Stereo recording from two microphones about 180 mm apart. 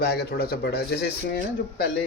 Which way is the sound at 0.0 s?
65° left (ahead or behind).